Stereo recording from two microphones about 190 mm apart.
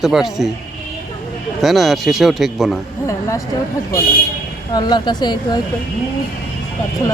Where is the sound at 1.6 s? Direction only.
Centre (ahead or behind).